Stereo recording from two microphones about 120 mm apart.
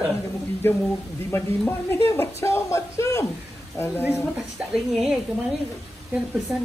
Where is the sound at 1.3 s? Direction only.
20° left (ahead or behind).